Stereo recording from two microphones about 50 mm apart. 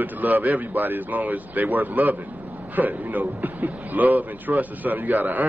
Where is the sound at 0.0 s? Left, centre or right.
Right.